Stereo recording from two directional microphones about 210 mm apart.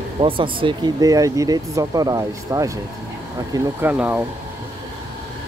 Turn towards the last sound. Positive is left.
turn(degrees=-5)  # may be behind; listen again after turning